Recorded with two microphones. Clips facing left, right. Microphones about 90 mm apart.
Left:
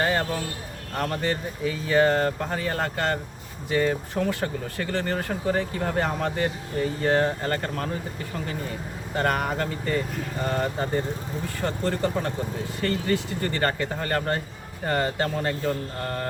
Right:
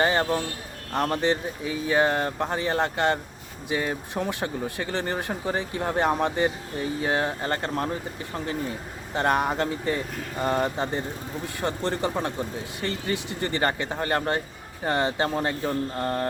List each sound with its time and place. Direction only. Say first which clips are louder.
0.0 s speech: right 2 dB; 20° right (ahead or behind)
7.5 s speech: right 1 dB; 25° right (ahead or behind)
9.1 s speech: right 2 dB; 20° right (ahead or behind)